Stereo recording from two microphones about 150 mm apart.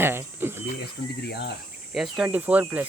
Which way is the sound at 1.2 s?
90° left.